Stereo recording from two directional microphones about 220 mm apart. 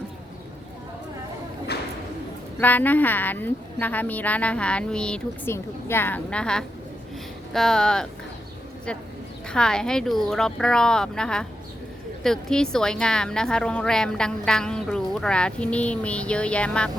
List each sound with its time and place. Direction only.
2.6 s a woman's voice: 10° left (ahead or behind)
9.5 s a woman's voice: 5° left (ahead or behind)